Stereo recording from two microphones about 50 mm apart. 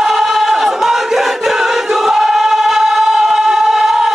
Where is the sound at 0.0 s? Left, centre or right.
Centre.